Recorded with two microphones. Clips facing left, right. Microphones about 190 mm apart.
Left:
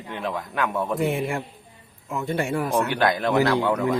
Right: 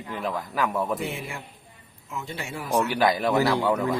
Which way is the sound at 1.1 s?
55° left (ahead or behind).